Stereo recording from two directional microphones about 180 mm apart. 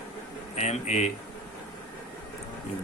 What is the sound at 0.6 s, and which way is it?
Speech, 40° left (ahead or behind).